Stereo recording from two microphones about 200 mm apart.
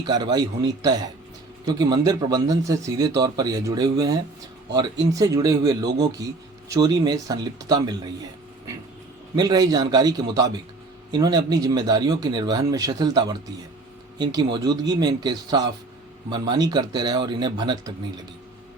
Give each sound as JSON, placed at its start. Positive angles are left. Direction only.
{"t": 0.0, "sound": "speech", "side_deg": -20}